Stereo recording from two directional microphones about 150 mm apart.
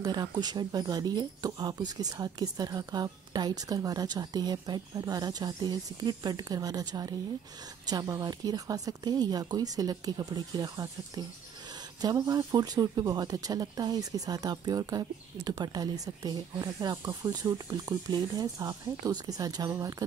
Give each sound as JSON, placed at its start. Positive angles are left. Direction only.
{"t": 0.0, "sound": "speech", "side_deg": -30}